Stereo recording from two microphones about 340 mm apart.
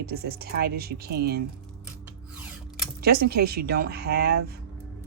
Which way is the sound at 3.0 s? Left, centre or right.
Right.